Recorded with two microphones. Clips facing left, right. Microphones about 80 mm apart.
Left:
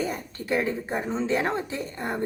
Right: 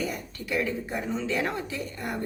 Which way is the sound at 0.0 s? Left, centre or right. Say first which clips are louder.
Left 2 dB; left.